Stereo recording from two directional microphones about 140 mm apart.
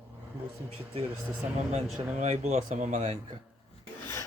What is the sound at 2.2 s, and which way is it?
Speech, 55° right (ahead or behind).